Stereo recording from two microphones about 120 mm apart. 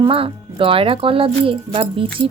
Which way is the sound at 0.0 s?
50° right (ahead or behind).